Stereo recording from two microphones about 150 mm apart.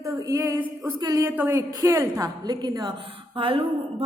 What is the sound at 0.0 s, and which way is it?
A woman's voice, 20° right (ahead or behind).